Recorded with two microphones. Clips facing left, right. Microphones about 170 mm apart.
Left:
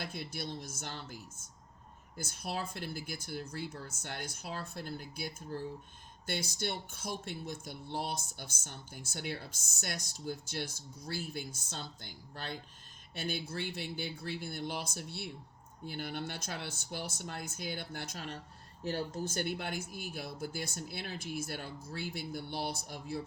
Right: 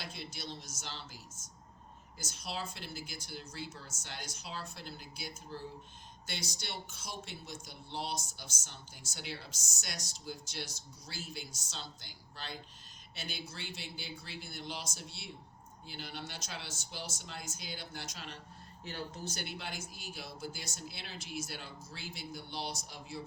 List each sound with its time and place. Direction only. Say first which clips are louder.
0.0 s speech: left 4 dB; 55° left (ahead or behind)